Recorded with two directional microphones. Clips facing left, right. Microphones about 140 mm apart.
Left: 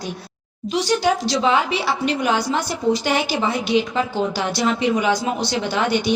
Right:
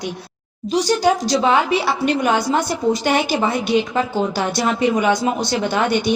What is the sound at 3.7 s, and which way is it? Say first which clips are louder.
Speech: even; 45° right (ahead or behind).